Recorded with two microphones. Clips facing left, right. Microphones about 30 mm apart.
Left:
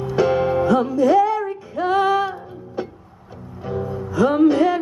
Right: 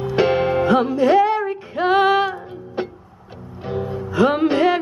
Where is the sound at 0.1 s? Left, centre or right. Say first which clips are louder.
Even; right.